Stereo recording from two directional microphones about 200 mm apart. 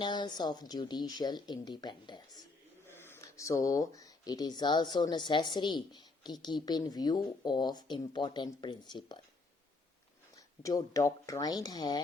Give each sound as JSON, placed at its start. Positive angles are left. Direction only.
{"t": 0.0, "sound": "speech", "side_deg": 20}
{"t": 2.8, "sound": "speech", "side_deg": 10}
{"t": 10.3, "sound": "speech", "side_deg": 15}